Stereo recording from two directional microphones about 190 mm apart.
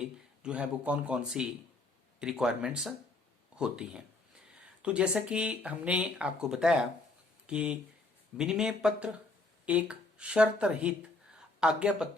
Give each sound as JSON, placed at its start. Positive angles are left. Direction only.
{"t": 0.4, "sound": "speech", "side_deg": -5}